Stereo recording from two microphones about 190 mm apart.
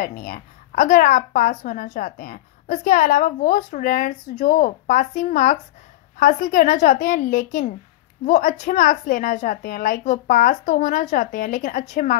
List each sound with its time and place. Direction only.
0.0 s a woman's voice: 45° left (ahead or behind)